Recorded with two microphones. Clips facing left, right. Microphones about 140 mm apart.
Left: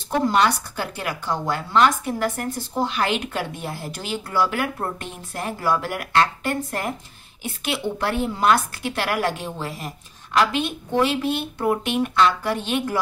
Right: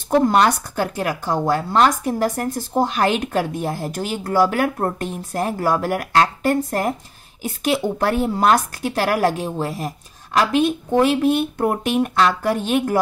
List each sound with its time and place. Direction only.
0.1 s a woman's voice: 45° right (ahead or behind)